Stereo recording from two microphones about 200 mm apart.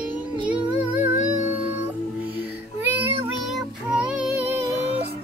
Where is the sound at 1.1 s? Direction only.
40° left (ahead or behind).